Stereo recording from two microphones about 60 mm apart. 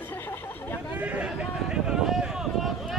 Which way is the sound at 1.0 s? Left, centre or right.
Right.